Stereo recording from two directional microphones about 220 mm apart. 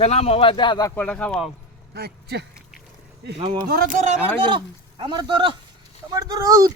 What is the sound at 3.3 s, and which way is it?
Speech, 25° right (ahead or behind).